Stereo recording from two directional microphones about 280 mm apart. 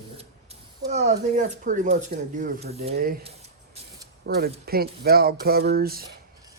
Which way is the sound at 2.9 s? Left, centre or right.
Right.